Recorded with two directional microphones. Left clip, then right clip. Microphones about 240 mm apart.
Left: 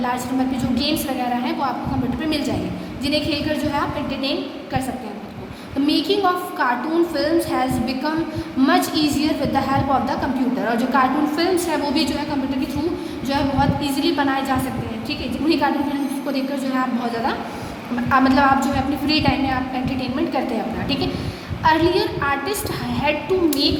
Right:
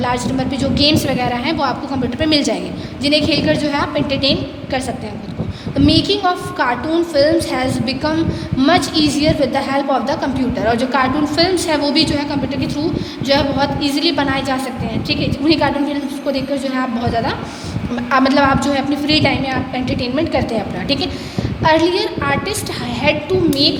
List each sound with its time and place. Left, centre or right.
0.0 s a woman's voice: right
5.8 s a woman's voice: right
18.1 s a woman's voice: right